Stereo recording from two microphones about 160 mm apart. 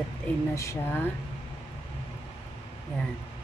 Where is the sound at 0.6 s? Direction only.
20° left (ahead or behind).